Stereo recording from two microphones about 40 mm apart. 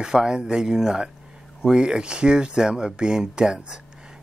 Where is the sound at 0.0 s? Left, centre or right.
Centre.